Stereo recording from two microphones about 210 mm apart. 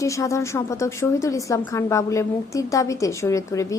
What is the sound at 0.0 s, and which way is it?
A woman's voice, 15° left (ahead or behind).